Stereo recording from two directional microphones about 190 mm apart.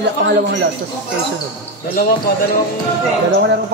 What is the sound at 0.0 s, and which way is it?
Speech, 65° right (ahead or behind).